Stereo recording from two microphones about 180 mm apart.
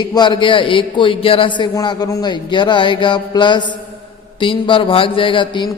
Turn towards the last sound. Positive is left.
turn(degrees=25)  # may be behind; listen again after turning